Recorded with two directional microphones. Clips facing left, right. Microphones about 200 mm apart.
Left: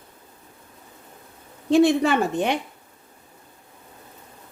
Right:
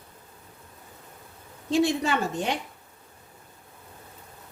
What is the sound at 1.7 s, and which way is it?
Speech, 60° left (ahead or behind).